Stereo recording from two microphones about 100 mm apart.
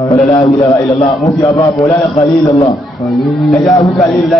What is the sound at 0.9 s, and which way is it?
Speech, 90° left.